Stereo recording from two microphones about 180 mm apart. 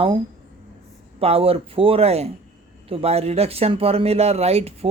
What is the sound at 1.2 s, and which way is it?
Speech, 35° right (ahead or behind).